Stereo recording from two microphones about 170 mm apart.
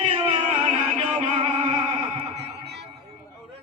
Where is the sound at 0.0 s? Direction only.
40° right (ahead or behind).